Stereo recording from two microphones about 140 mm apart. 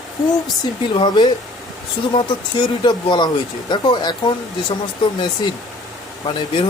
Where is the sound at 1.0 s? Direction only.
30° left (ahead or behind).